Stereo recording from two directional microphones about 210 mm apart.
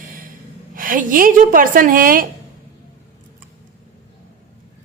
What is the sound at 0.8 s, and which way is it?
A woman's voice, 40° right (ahead or behind).